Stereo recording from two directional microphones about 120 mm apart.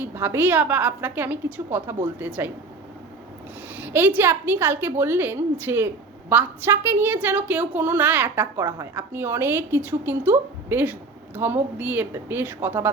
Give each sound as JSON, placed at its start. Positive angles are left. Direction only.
{"t": 0.0, "sound": "a woman's voice", "side_deg": -20}
{"t": 3.8, "sound": "a woman's voice", "side_deg": -15}